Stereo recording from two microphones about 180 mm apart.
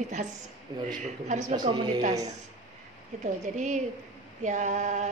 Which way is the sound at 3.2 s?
40° right (ahead or behind).